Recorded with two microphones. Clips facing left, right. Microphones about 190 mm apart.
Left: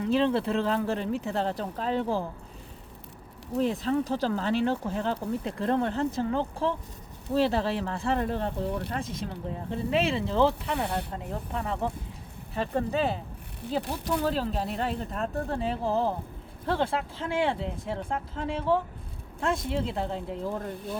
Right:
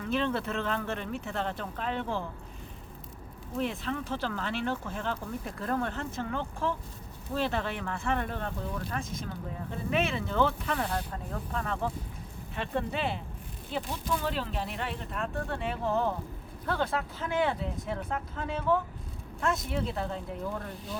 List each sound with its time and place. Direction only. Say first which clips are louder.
0.0 s speech: left 6 dB; 30° left (ahead or behind)
3.6 s speech: left 6 dB; 35° left (ahead or behind)
12.5 s speech: left 5 dB; 40° left (ahead or behind)
20.7 s speech: left 4 dB; 55° left (ahead or behind)